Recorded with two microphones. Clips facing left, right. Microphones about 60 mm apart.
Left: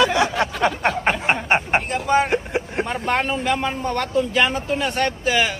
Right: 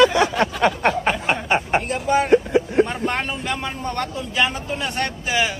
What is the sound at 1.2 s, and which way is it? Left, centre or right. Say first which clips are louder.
Snicker: left 1 dB; left.